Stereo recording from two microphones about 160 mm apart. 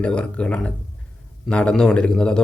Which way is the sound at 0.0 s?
5° left (ahead or behind).